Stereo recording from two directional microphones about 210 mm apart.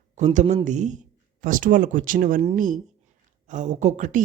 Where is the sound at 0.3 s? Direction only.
35° right (ahead or behind).